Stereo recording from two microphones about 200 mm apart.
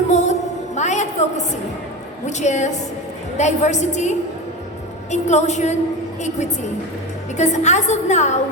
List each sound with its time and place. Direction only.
0.1 s music: 35° left (ahead or behind)
0.8 s a sound: 35° left (ahead or behind)
2.2 s a woman's voice: 35° left (ahead or behind)
5.1 s a woman's voice: 35° left (ahead or behind)
7.3 s a woman's voice: 35° left (ahead or behind)